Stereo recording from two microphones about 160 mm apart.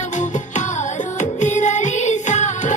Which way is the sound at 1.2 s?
50° left (ahead or behind).